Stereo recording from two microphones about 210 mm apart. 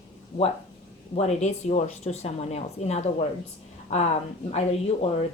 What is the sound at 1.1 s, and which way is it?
Speech, 30° left (ahead or behind).